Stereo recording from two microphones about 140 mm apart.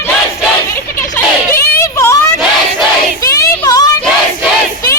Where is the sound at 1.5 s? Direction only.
20° left (ahead or behind).